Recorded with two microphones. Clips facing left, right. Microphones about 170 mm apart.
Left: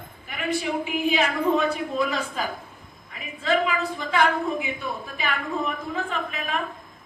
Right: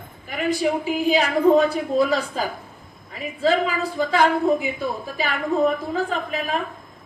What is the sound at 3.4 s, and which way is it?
A woman's voice, 35° right (ahead or behind).